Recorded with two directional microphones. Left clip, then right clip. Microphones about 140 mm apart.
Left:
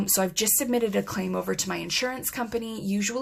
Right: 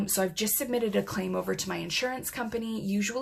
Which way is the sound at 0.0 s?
45° left (ahead or behind).